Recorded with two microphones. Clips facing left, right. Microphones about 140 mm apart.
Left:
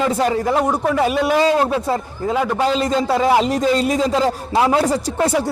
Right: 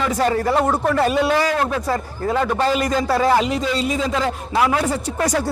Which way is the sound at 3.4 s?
40° left (ahead or behind).